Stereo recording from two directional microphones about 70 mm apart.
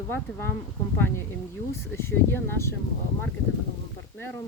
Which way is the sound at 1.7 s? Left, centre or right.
Left.